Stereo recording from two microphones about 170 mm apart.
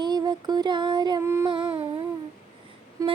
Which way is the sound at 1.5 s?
30° right (ahead or behind).